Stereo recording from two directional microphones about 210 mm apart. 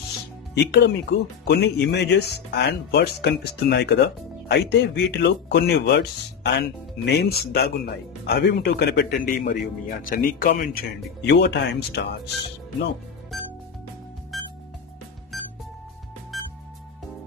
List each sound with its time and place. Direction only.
0.7 s speech: 50° left (ahead or behind)
13.3 s music: centre (ahead or behind)